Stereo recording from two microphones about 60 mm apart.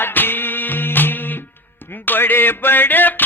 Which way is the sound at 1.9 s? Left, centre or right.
Left.